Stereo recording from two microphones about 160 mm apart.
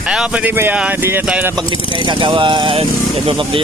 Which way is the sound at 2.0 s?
30° right (ahead or behind).